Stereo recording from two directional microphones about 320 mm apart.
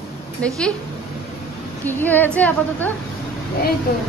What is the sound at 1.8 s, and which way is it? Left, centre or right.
A woman's voice, centre.